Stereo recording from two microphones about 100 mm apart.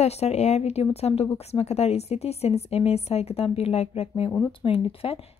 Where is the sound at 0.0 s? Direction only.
90° left.